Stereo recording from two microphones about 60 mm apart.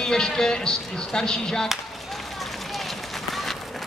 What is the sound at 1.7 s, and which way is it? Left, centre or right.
Run, centre.